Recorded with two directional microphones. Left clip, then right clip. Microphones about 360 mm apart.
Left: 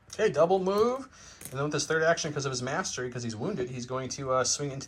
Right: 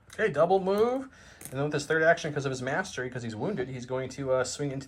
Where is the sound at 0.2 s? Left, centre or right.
Centre.